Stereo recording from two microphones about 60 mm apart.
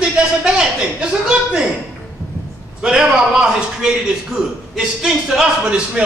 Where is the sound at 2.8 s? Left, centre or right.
Centre.